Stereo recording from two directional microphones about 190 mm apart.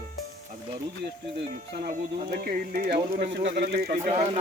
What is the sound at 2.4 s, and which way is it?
Speech, 55° right (ahead or behind).